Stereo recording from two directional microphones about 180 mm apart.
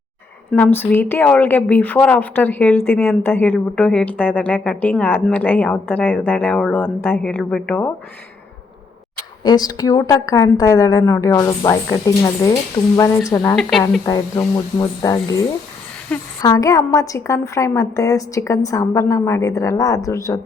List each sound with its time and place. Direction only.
0.5 s a woman's voice: 10° left (ahead or behind)
9.4 s a woman's voice: 20° left (ahead or behind)
13.6 s speech: centre (ahead or behind)
14.0 s a woman's voice: 20° left (ahead or behind)